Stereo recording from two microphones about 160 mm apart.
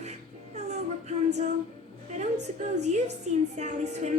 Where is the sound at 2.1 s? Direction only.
45° right (ahead or behind).